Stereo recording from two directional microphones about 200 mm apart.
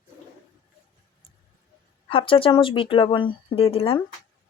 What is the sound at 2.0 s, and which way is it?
Speech, 25° left (ahead or behind).